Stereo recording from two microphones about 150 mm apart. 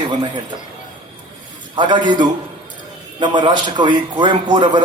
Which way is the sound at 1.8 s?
30° right (ahead or behind).